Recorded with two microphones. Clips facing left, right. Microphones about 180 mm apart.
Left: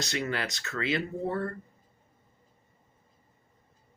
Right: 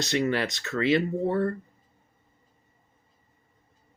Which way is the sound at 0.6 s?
35° right (ahead or behind).